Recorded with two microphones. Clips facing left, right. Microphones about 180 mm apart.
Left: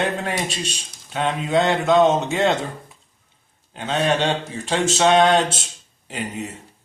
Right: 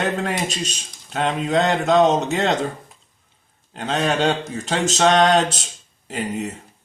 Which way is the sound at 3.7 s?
40° right (ahead or behind).